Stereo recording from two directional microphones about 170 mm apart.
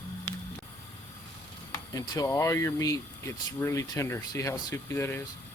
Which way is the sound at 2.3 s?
15° left (ahead or behind).